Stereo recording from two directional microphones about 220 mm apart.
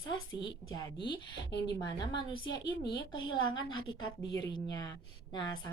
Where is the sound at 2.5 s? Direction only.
20° left (ahead or behind).